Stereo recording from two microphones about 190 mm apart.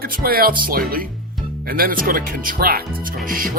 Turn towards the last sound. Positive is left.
turn(degrees=-50)  # may be behind; listen again after turning